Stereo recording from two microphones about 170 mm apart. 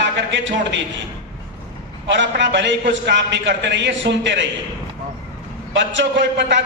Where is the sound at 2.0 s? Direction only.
90° right.